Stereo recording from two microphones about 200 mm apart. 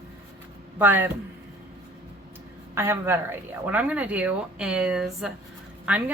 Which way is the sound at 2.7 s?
10° right (ahead or behind).